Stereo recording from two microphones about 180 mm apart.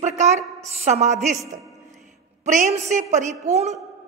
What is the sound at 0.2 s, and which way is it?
A woman's voice, 40° right (ahead or behind).